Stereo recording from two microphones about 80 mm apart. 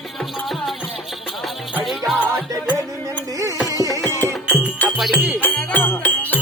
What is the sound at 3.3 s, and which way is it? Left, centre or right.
Carnatic music, right.